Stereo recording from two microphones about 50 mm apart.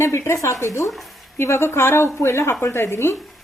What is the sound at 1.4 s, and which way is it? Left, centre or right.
A woman's voice, left.